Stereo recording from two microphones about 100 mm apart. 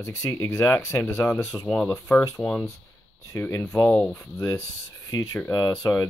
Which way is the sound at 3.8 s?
10° left (ahead or behind).